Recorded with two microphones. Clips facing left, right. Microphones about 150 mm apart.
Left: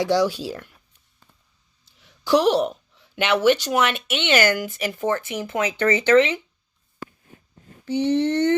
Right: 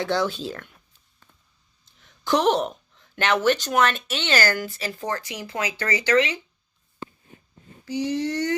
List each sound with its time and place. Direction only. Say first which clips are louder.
0.0 s speech: left 4 dB; 15° left (ahead or behind)
2.0 s a sound: left 4 dB; 10° left (ahead or behind)
3.7 s speech: even; 15° left (ahead or behind)
4.0 s speech: left 3 dB; 40° right (ahead or behind)
4.3 s speech: left 4 dB; 15° left (ahead or behind)
7.9 s a sound: left 5 dB; 10° right (ahead or behind)